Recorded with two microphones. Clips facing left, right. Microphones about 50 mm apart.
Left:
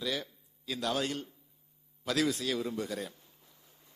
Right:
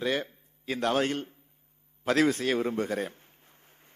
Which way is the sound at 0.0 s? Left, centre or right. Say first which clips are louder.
Right 6 dB; right.